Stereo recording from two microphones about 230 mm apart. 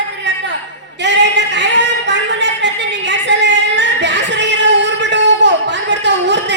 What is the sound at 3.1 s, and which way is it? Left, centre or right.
Singing, right.